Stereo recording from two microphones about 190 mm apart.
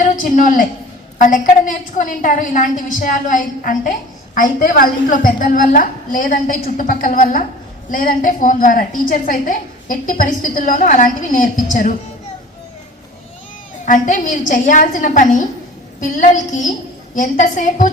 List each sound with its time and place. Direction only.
0.0 s a woman's voice: 45° left (ahead or behind)
13.8 s a woman's voice: 40° left (ahead or behind)